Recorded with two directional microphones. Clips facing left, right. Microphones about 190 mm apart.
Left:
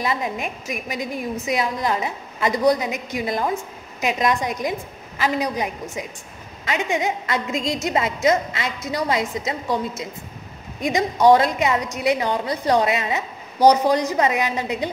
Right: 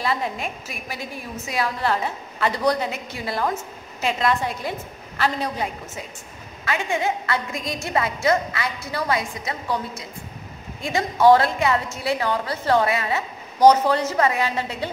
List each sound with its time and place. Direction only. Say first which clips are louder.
0.0 s a woman's voice: left 1 dB; 15° left (ahead or behind)